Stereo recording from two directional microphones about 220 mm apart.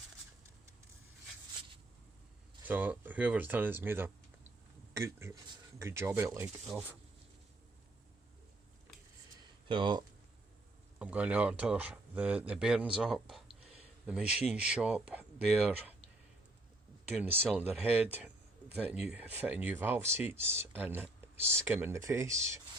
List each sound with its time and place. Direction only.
2.6 s speech: 10° right (ahead or behind)
9.4 s a sound: 20° right (ahead or behind)
11.0 s speech: 5° right (ahead or behind)
17.1 s speech: 5° right (ahead or behind)